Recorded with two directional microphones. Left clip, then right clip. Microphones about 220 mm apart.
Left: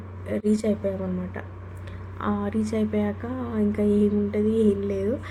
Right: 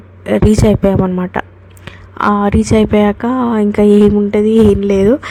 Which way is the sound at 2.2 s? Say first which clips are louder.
Right 16 dB; 45° right (ahead or behind).